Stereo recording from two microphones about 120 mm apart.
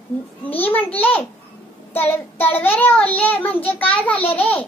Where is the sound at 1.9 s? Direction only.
15° left (ahead or behind).